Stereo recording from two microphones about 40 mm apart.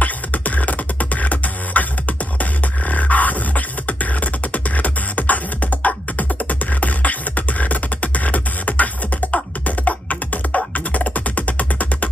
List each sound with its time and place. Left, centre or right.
0.0 s beatboxing: left
2.9 s music: left